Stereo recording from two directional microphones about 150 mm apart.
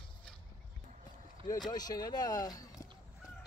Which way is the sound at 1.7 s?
25° left (ahead or behind).